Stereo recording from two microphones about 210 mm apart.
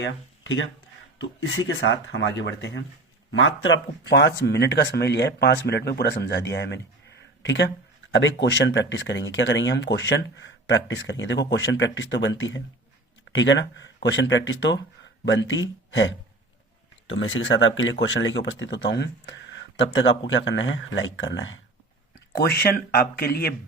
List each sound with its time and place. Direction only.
0.0 s speech: 65° left (ahead or behind)
22.4 s speech: 50° left (ahead or behind)